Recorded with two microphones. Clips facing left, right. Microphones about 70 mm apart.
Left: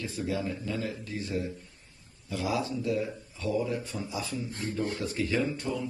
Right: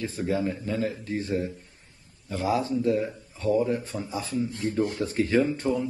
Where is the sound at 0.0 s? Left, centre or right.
Right.